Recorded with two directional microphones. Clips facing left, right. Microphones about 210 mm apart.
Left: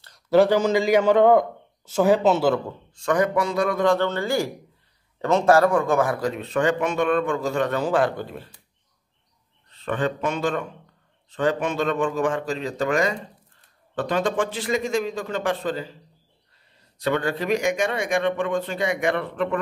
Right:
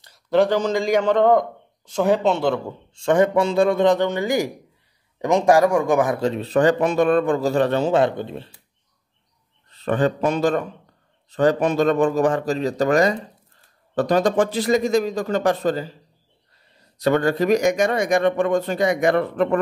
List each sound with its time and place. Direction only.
0.3 s a man's voice: 5° left (ahead or behind)
2.9 s speech: 25° right (ahead or behind)
9.8 s speech: 35° right (ahead or behind)
17.0 s speech: 40° right (ahead or behind)